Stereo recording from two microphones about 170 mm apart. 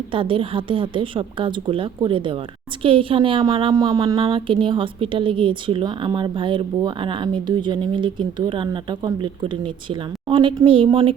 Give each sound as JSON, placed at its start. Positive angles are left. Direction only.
{"t": 0.1, "sound": "a woman's voice", "side_deg": -30}